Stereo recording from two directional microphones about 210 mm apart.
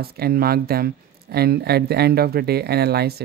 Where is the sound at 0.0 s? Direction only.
50° right (ahead or behind).